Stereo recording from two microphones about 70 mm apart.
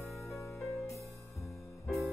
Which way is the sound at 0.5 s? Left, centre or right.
Left.